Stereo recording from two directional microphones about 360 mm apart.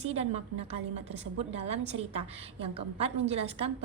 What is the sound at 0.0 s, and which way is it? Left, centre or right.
A woman's voice, centre.